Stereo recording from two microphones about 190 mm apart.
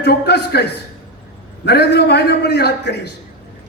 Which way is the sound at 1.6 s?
60° left (ahead or behind).